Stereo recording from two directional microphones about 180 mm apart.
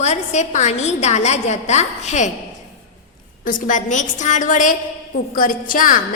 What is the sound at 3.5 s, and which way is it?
A woman's voice, 45° left (ahead or behind).